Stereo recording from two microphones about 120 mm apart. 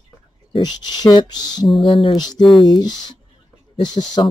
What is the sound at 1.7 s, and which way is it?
Speech, centre (ahead or behind).